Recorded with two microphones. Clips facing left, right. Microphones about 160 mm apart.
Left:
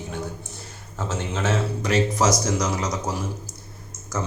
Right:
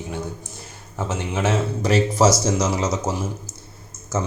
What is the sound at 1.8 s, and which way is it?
Speech, 30° right (ahead or behind).